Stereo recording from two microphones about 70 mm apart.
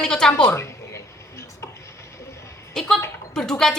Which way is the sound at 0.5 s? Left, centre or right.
Left.